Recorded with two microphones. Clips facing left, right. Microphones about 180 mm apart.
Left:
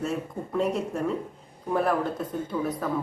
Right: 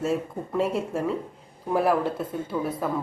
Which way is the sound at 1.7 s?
5° right (ahead or behind).